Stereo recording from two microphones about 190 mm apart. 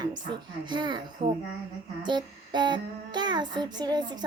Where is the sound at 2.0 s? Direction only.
25° right (ahead or behind).